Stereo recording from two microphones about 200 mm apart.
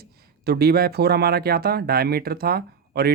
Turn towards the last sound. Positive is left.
turn(degrees=-50)  # may be behind; listen again after turning